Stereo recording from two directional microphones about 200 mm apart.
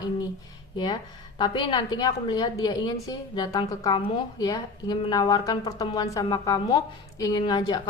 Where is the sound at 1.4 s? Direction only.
25° left (ahead or behind).